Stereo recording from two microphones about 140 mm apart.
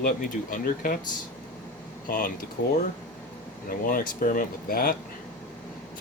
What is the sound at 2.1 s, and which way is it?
Speech, 90° left.